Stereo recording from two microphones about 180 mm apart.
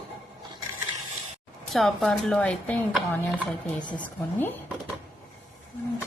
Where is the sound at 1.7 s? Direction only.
Centre (ahead or behind).